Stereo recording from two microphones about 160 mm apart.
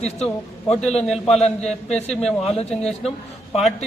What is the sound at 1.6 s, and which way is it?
Speech, 45° left (ahead or behind).